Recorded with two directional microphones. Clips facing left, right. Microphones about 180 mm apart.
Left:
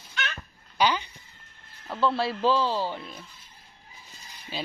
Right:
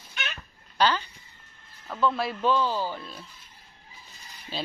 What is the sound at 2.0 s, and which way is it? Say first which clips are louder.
Speech: left 1 dB; 30° left (ahead or behind).